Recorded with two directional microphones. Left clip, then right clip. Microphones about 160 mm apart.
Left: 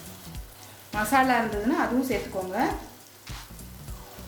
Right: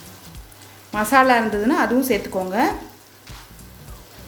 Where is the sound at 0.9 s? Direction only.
40° right (ahead or behind).